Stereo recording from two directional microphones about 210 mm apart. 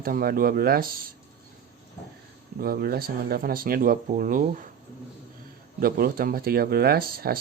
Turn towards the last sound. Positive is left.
turn(degrees=-45)  # may be behind; listen again after turning